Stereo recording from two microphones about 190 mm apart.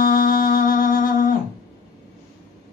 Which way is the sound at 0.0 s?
45° left (ahead or behind).